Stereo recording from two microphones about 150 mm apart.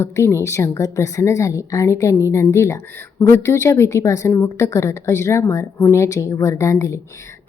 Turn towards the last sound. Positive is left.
turn(degrees=20)  # may be behind; listen again after turning